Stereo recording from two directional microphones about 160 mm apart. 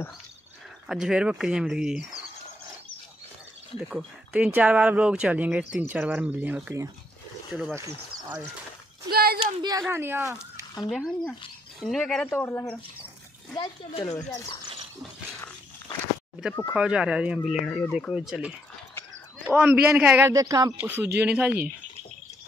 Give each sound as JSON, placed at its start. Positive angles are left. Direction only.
{"t": 0.8, "sound": "speech", "side_deg": -5}
{"t": 3.9, "sound": "speech", "side_deg": -10}
{"t": 9.1, "sound": "a child's voice", "side_deg": -70}
{"t": 9.4, "sound": "speech", "side_deg": -25}
{"t": 9.8, "sound": "speech", "side_deg": -15}
{"t": 10.9, "sound": "speech", "side_deg": 0}
{"t": 13.6, "sound": "speech", "side_deg": 35}
{"t": 16.7, "sound": "speech", "side_deg": -5}
{"t": 20.3, "sound": "speech", "side_deg": -25}
{"t": 20.8, "sound": "speech", "side_deg": -15}